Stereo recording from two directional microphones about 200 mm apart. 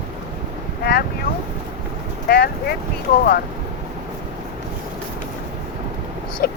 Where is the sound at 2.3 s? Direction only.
50° left (ahead or behind).